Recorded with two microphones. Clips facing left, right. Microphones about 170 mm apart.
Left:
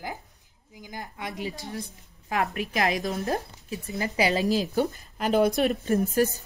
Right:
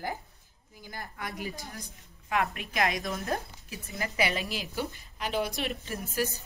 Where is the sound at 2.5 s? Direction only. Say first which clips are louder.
Left 4 dB; 35° left (ahead or behind).